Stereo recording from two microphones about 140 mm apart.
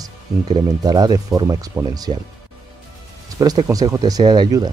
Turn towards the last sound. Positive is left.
turn(degrees=-30)  # may be behind; listen again after turning